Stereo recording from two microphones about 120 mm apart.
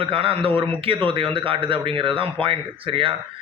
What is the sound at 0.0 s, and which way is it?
A man's voice, 50° right (ahead or behind).